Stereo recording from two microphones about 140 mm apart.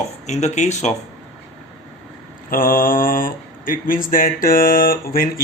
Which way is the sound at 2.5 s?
90° left.